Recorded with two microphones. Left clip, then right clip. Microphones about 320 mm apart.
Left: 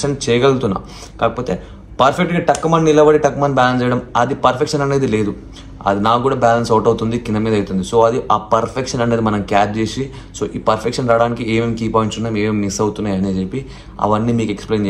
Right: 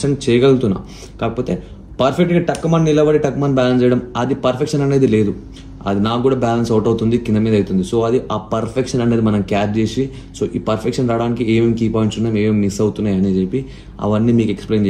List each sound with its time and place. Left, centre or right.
0.0 s speech: centre